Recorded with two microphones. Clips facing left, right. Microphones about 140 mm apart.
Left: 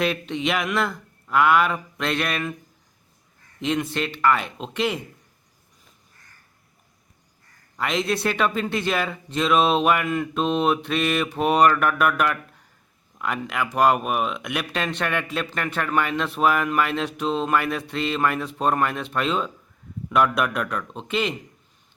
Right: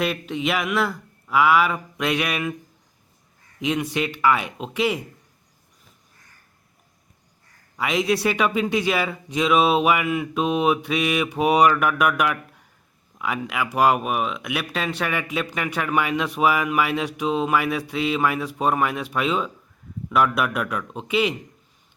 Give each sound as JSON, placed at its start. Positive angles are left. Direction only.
{"t": 0.0, "sound": "speech", "side_deg": -5}
{"t": 3.6, "sound": "speech", "side_deg": -10}
{"t": 7.8, "sound": "speech", "side_deg": -5}